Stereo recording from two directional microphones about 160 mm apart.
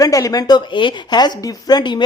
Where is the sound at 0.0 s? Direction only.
20° left (ahead or behind).